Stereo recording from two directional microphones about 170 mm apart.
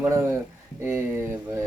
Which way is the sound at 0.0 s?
15° right (ahead or behind).